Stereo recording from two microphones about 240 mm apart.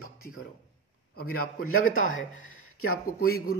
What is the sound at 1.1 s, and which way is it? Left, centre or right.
Speech, left.